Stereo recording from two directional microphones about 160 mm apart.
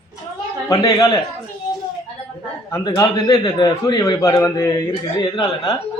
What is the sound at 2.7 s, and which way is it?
A man's voice, 20° left (ahead or behind).